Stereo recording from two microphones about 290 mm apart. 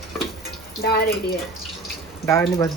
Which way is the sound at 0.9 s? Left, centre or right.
Left.